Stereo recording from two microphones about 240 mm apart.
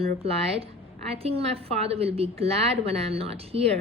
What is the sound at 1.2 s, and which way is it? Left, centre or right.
A woman's voice, right.